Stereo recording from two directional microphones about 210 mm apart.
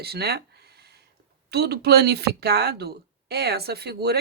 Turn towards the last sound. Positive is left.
turn(degrees=-50)  # may be behind; listen again after turning